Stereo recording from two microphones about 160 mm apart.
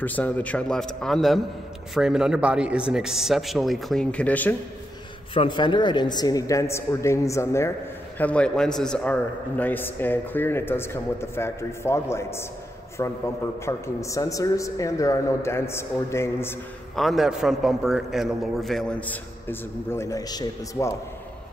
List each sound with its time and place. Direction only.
0.0 s a man's voice: 10° left (ahead or behind)
5.3 s speech: 30° left (ahead or behind)
8.2 s a man's voice: 10° left (ahead or behind)
16.9 s a man's voice: centre (ahead or behind); by 21.0 s 20° left (ahead or behind)